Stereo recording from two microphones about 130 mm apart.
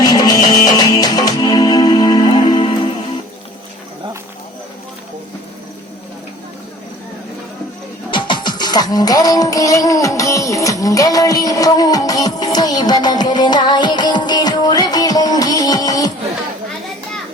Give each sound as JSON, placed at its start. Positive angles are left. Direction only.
{"t": 0.0, "sound": "music", "side_deg": 30}
{"t": 8.1, "sound": "music", "side_deg": 35}